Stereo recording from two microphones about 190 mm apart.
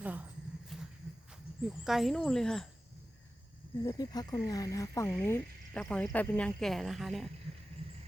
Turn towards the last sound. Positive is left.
turn(degrees=0)  # may be behind; listen again after turning